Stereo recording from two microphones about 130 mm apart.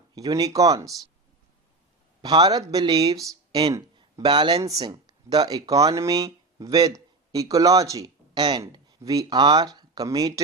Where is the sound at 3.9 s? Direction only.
35° right (ahead or behind).